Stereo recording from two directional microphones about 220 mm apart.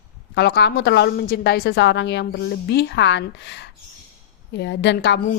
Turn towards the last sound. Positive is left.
turn(degrees=50)  # may be behind; listen again after turning